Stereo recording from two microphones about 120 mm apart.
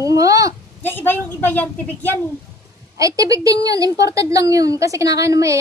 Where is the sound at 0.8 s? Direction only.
15° left (ahead or behind).